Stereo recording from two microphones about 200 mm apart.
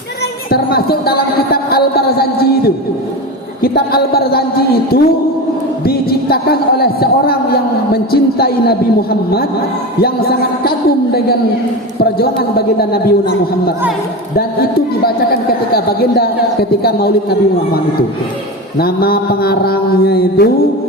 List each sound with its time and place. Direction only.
0.5 s a man's voice: 50° left (ahead or behind)
18.8 s a man's voice: 50° left (ahead or behind)